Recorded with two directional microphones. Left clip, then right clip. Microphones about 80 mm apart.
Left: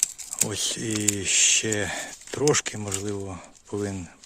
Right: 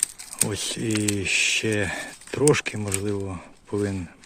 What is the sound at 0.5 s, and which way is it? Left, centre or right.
Speech, centre.